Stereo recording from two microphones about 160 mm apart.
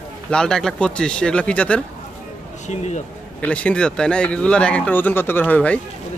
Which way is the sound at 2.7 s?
45° left (ahead or behind).